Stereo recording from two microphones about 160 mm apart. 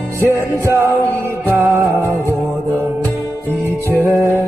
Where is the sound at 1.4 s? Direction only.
15° right (ahead or behind).